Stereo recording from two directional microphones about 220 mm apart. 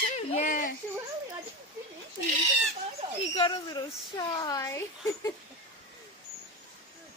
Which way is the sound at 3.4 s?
20° left (ahead or behind).